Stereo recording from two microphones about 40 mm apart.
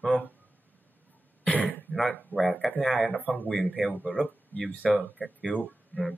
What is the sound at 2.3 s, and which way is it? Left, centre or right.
Speech, left.